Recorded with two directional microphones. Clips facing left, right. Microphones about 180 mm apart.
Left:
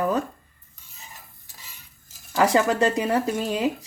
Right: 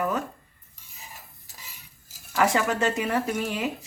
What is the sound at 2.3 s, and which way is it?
A woman's voice, 30° left (ahead or behind).